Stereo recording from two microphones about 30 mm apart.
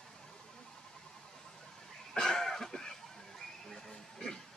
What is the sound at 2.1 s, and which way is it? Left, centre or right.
Cough, centre.